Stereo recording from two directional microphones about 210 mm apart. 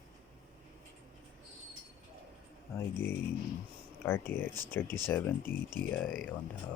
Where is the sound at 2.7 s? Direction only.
10° left (ahead or behind).